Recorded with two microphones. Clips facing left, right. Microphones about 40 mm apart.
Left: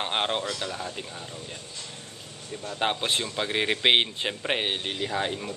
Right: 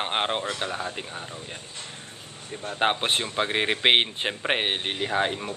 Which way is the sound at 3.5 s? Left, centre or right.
Right.